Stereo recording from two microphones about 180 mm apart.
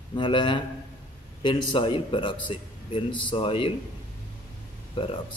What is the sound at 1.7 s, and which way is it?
A man's voice, 25° left (ahead or behind).